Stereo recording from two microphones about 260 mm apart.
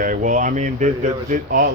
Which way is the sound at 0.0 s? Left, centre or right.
Right.